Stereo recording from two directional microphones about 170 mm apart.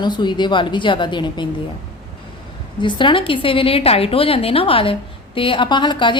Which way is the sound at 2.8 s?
30° left (ahead or behind).